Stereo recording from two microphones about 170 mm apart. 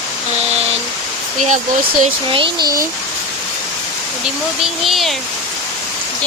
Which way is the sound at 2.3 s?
25° right (ahead or behind).